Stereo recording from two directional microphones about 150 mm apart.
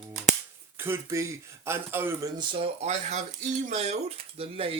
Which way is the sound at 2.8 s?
50° right (ahead or behind).